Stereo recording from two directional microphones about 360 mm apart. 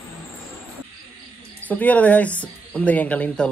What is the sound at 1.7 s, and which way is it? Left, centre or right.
Speech, centre.